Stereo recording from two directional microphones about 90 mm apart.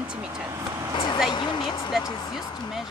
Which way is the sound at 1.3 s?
60° left (ahead or behind).